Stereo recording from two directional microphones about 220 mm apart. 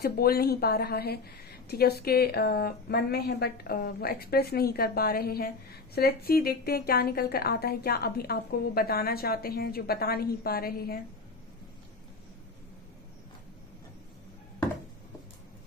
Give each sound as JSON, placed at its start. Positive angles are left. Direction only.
{"t": 0.0, "sound": "a woman's voice", "side_deg": 45}